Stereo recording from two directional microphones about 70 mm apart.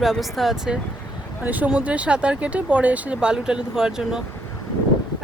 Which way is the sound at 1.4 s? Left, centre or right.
Right.